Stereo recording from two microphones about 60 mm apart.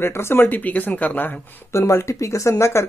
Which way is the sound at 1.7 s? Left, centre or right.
Left.